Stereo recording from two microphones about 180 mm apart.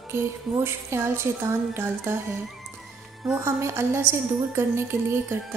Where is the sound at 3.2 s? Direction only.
15° right (ahead or behind).